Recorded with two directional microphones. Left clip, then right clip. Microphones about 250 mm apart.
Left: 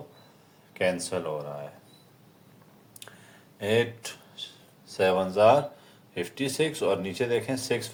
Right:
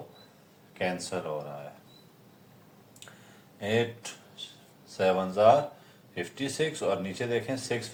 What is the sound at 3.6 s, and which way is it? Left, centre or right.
Speech, left.